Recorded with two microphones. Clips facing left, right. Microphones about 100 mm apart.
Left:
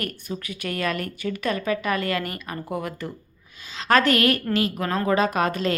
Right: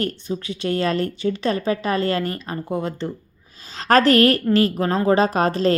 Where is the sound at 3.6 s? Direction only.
40° right (ahead or behind).